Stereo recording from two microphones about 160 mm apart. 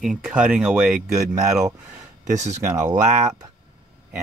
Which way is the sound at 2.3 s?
45° right (ahead or behind).